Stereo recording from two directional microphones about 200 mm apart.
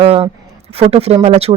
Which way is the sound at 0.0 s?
30° right (ahead or behind).